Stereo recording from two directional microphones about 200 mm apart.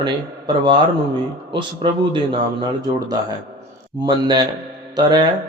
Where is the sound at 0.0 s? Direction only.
25° right (ahead or behind).